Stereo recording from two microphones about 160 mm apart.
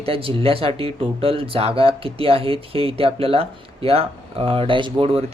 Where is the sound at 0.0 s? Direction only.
35° right (ahead or behind).